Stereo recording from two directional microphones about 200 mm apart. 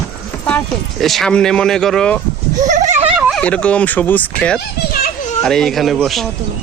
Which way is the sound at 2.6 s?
40° right (ahead or behind).